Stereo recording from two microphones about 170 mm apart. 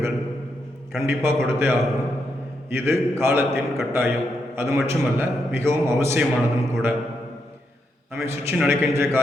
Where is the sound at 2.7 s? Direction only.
15° right (ahead or behind).